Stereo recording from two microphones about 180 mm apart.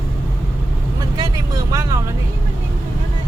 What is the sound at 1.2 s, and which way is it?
Vehicle, 20° right (ahead or behind).